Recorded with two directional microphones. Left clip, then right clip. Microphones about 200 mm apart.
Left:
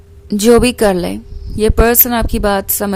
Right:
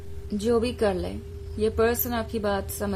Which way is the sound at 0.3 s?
45° left (ahead or behind).